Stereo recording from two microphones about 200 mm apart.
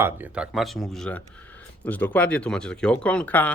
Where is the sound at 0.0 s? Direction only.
5° right (ahead or behind).